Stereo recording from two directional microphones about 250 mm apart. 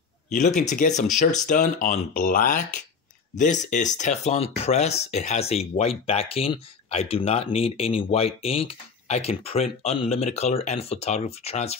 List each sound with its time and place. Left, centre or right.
0.6 s speech: left